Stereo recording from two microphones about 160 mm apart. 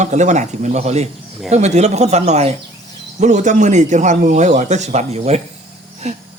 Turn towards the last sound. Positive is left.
turn(degrees=-45)  # may be behind; listen again after turning